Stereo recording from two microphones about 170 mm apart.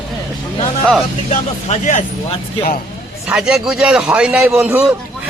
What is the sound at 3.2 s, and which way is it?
A man's voice, 5° right (ahead or behind).